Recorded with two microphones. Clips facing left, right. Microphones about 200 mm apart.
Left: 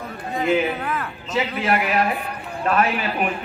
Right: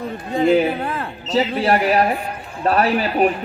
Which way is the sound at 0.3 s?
35° right (ahead or behind).